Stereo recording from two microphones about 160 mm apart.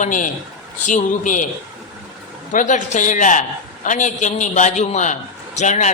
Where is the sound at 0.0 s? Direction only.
55° left (ahead or behind).